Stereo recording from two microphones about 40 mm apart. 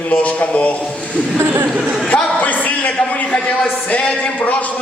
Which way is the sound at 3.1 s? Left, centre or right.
Left.